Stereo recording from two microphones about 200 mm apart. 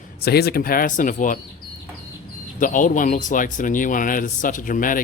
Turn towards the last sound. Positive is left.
turn(degrees=40)  # may be behind; listen again after turning